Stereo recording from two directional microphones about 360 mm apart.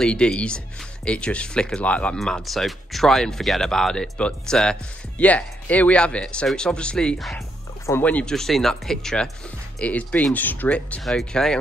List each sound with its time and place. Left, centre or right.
0.0 s speech: centre